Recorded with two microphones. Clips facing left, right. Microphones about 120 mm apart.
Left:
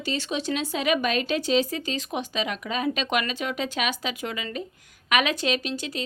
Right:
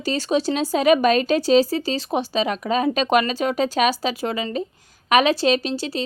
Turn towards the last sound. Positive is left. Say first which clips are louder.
# right 6 dB
turn(degrees=-35)  # may be behind; listen again after turning